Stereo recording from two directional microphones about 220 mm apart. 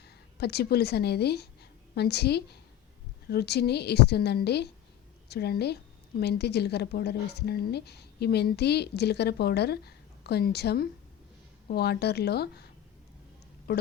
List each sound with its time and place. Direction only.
0.0 s a woman's voice: 45° left (ahead or behind)
13.7 s speech: 45° left (ahead or behind)